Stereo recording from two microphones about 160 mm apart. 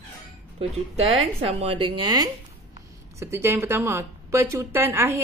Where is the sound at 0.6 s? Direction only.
35° right (ahead or behind).